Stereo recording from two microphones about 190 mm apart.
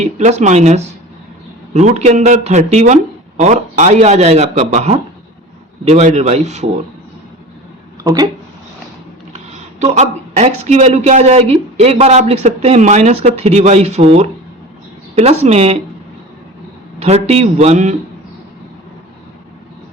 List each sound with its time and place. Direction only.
0.0 s a man's voice: 35° right (ahead or behind)
8.0 s speech: 20° right (ahead or behind)
9.8 s a man's voice: 40° right (ahead or behind)
17.0 s a man's voice: 35° right (ahead or behind)